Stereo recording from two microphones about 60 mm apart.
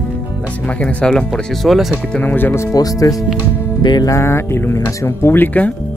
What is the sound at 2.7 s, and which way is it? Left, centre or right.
Speech, left.